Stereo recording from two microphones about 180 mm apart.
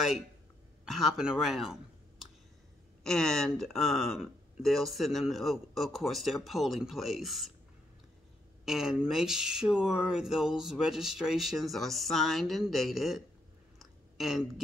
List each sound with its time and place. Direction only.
0.8 s speech: centre (ahead or behind)
8.6 s speech: 5° right (ahead or behind)
13.7 s chewing: centre (ahead or behind)